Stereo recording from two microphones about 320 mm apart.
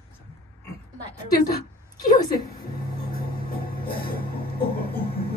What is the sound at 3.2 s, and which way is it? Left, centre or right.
Music, left.